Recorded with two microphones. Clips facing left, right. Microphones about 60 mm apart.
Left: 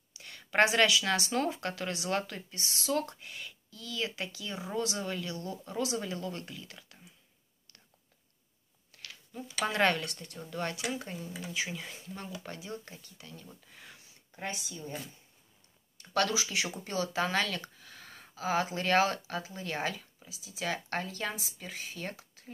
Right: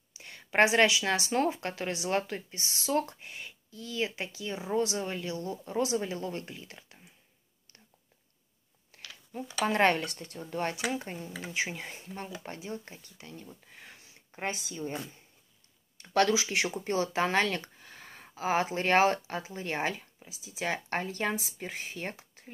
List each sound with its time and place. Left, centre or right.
0.1 s a woman's voice: right
9.3 s speech: right
13.7 s a sound: right
16.0 s speech: right